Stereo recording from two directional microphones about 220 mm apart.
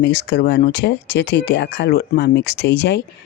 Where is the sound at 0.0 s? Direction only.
50° left (ahead or behind).